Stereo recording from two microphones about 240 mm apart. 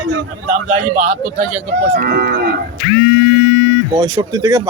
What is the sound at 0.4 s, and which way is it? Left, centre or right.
Speech, right.